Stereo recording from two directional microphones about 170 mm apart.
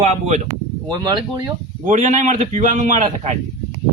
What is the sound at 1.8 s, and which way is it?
A man's voice, 45° right (ahead or behind).